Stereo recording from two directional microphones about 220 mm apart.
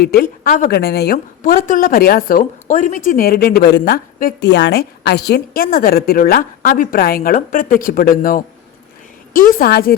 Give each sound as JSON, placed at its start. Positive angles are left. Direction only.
{"t": 0.0, "sound": "a woman's voice", "side_deg": 45}